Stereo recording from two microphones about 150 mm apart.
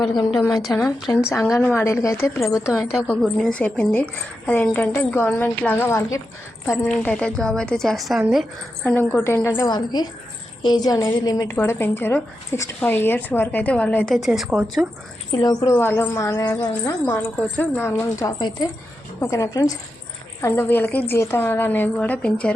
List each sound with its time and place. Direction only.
0.6 s a woman's voice: centre (ahead or behind)
1.5 s speech: 15° left (ahead or behind)
3.1 s a woman's voice: 5° left (ahead or behind)
8.8 s a woman's voice: 10° left (ahead or behind)
9.6 s a woman's voice: 30° left (ahead or behind); by 14.8 s centre (ahead or behind)
15.3 s a woman's voice: 25° left (ahead or behind); by 22.5 s 10° left (ahead or behind)